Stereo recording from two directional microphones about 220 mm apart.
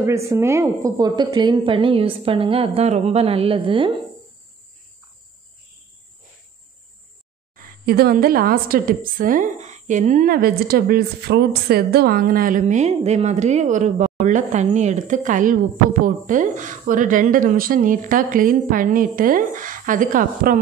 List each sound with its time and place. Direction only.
0.3 s a woman's voice: 15° right (ahead or behind)
7.5 s a woman's voice: 40° right (ahead or behind)